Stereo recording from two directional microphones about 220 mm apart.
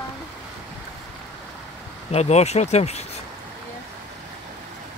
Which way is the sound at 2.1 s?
30° left (ahead or behind).